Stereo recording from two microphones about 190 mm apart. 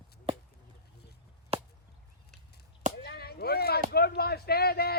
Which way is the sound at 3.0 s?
55° left (ahead or behind).